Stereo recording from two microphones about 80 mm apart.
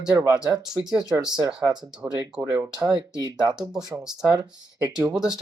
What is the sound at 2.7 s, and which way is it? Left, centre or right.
Speech, right.